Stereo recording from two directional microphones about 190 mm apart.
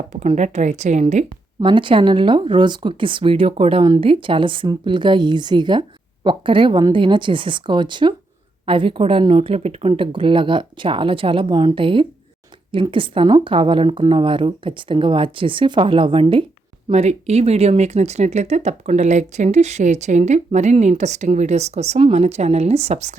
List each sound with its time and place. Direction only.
0.1 s speech: 35° right (ahead or behind)
1.6 s speech: 25° right (ahead or behind)